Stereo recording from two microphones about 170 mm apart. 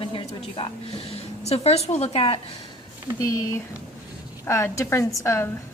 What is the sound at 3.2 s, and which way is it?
A woman's voice, 20° left (ahead or behind).